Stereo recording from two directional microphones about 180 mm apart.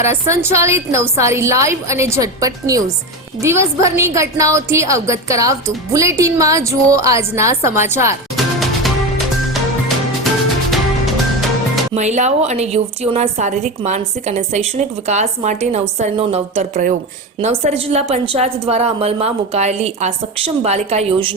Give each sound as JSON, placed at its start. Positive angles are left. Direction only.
{"t": 0.0, "sound": "a woman's voice", "side_deg": -15}
{"t": 8.8, "sound": "music", "side_deg": 0}
{"t": 10.7, "sound": "music", "side_deg": 0}
{"t": 11.9, "sound": "a woman's voice", "side_deg": -40}